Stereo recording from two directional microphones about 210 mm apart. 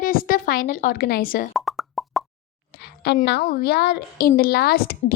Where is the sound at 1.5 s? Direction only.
Centre (ahead or behind).